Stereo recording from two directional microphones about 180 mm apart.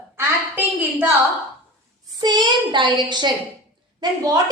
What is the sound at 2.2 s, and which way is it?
Child singing, 25° right (ahead or behind).